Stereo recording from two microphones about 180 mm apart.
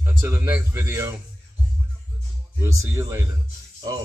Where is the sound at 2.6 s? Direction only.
15° right (ahead or behind).